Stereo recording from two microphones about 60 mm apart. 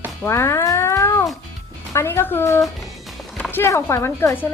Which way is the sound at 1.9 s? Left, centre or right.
Left.